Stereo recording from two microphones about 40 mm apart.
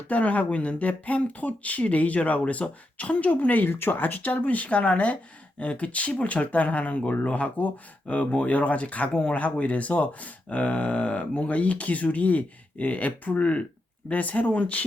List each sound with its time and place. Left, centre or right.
0.1 s speech: left
4.0 s speech: left